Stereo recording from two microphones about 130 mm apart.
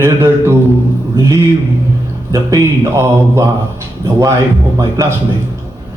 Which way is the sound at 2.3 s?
25° right (ahead or behind).